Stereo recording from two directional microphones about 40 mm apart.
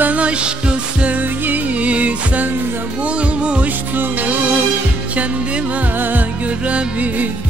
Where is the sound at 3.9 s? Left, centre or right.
Right.